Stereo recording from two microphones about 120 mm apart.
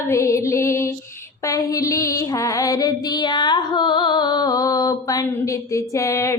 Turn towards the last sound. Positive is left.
turn(degrees=25)  # may be behind; listen again after turning